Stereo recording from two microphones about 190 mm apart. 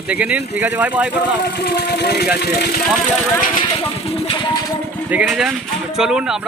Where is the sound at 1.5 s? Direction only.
60° left (ahead or behind).